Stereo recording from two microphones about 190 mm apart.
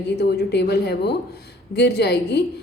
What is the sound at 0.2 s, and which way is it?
A woman's voice, 60° left (ahead or behind).